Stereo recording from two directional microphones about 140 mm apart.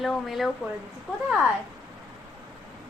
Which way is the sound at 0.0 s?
Centre (ahead or behind).